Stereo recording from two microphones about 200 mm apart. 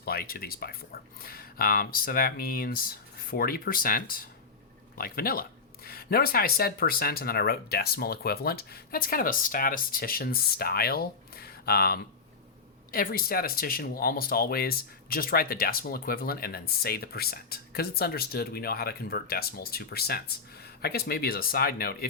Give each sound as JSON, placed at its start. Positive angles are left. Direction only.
{"t": 0.0, "sound": "speech", "side_deg": 50}